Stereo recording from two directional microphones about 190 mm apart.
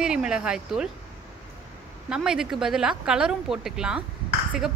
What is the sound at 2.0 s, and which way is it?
Speech, 5° right (ahead or behind).